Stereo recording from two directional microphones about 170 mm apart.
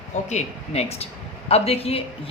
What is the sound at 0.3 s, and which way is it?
A woman's voice, 40° left (ahead or behind).